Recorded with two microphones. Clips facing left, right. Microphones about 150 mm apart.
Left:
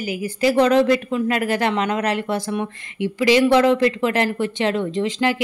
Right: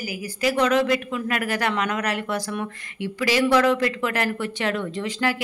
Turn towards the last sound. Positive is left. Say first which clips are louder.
# left 5 dB
turn(degrees=20)  # may be behind; listen again after turning